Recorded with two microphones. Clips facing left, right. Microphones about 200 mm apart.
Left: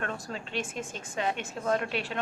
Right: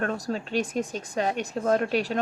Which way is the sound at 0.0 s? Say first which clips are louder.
Right 7 dB; 40° right (ahead or behind).